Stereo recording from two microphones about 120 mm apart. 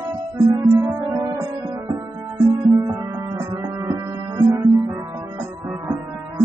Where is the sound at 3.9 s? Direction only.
40° right (ahead or behind).